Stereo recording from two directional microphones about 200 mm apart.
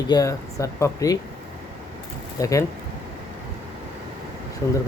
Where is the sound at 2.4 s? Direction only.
15° left (ahead or behind).